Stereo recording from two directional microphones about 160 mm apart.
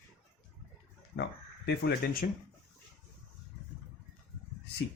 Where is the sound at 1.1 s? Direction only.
90° left.